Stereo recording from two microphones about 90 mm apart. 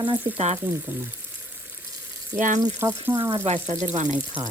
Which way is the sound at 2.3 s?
35° right (ahead or behind).